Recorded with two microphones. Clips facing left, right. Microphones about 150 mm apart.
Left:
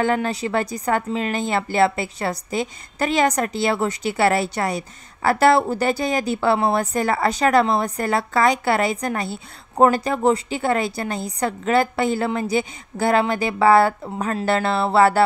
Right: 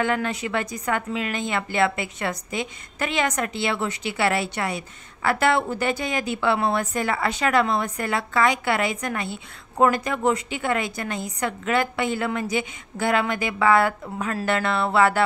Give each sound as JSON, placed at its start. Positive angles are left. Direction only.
{"t": 0.0, "sound": "speech", "side_deg": 35}